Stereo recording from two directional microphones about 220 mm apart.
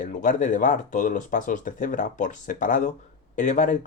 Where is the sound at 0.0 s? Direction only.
35° left (ahead or behind).